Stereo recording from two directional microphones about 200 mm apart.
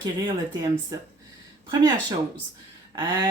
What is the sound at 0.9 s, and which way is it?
Speech, 20° right (ahead or behind).